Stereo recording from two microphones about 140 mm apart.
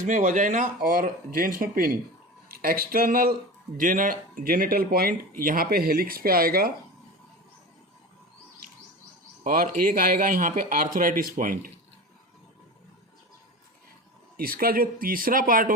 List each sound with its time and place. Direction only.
0.0 s speech: 65° right (ahead or behind); by 3.3 s 90° right
3.8 s speech: 75° right (ahead or behind); by 6.7 s 90° right
9.4 s a man's voice: 75° right (ahead or behind)
14.3 s speech: 90° right